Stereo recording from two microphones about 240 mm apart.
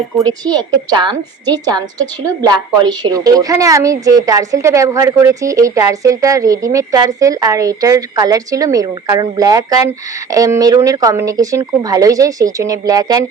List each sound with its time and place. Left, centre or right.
0.4 s a woman's voice: centre
3.0 s a woman's voice: centre